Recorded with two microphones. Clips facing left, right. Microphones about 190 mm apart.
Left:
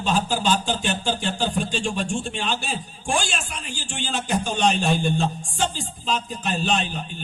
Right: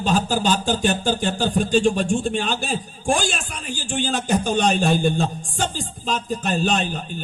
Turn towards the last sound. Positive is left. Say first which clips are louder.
# right 2 dB
turn(degrees=-45)  # may be behind; listen again after turning